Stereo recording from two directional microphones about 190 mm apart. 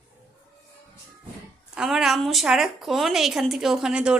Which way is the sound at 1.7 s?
5° right (ahead or behind).